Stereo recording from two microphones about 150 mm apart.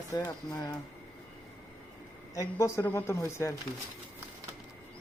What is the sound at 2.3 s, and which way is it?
Speech, 20° left (ahead or behind).